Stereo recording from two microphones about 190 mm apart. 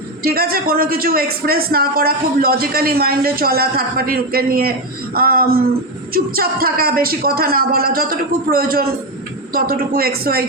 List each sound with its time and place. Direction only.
0.2 s a man's voice: 50° right (ahead or behind)